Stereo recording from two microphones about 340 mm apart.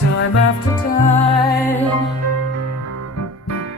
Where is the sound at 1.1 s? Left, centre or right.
Centre.